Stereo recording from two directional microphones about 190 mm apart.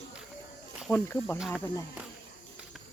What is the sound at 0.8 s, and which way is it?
Speech, 10° left (ahead or behind).